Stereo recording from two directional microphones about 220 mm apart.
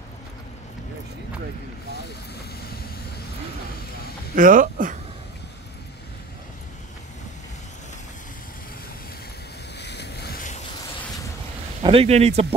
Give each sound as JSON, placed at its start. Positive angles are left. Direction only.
{"t": 4.4, "sound": "speech", "side_deg": -40}
{"t": 9.8, "sound": "a sound", "side_deg": 50}
{"t": 11.8, "sound": "speech", "side_deg": -25}